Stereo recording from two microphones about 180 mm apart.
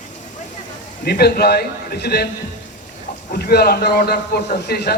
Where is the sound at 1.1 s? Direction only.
60° left (ahead or behind).